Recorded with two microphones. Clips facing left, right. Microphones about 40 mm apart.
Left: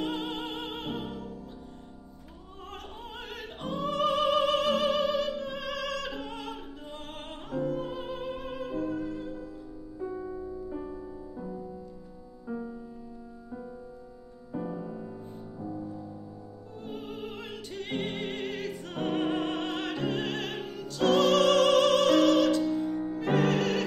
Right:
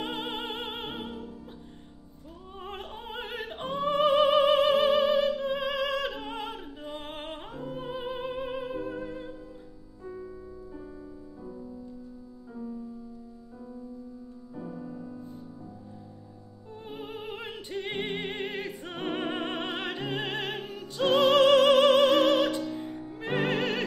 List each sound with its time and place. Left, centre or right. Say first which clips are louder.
0.0 s music: left 1 dB; right
2.6 s opera: right 3 dB; right
5.3 s music: right 5 dB; centre
11.3 s music: left 2 dB; left
14.5 s music: left 4 dB; left
16.8 s opera: even; centre
22.8 s music: left 7 dB; centre